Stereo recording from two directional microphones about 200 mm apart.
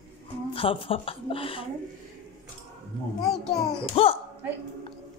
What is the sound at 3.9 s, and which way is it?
Speech, 30° left (ahead or behind).